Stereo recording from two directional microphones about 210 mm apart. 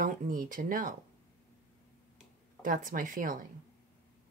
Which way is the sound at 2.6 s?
40° right (ahead or behind).